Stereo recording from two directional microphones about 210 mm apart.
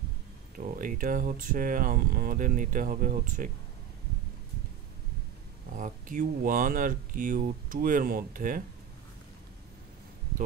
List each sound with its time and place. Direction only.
0.6 s speech: 40° right (ahead or behind)
5.8 s speech: 40° right (ahead or behind)